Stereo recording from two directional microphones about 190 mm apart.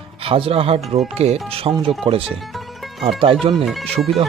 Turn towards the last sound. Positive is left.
turn(degrees=-30)  # may be behind; listen again after turning